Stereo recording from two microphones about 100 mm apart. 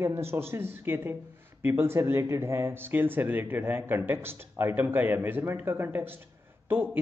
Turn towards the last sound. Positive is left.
turn(degrees=-20)  # may be behind; listen again after turning